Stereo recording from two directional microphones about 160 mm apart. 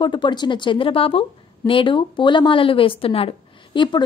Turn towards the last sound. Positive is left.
turn(degrees=30)  # may be behind; listen again after turning